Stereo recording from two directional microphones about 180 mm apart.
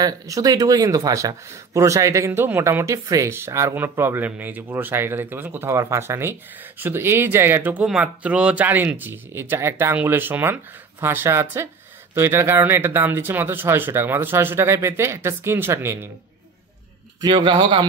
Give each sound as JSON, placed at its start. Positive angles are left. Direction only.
{"t": 0.0, "sound": "speech", "side_deg": -20}
{"t": 17.2, "sound": "a man's voice", "side_deg": -25}